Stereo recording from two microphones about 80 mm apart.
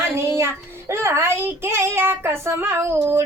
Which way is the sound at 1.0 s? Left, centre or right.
Right.